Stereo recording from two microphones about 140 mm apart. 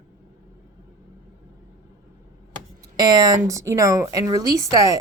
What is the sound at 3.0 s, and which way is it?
A woman's voice, 25° right (ahead or behind).